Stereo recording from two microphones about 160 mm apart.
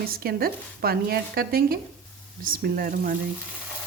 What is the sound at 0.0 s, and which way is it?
Speech, 70° right (ahead or behind).